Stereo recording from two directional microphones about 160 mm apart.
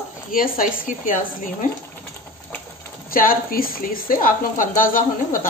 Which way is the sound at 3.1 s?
60° left (ahead or behind).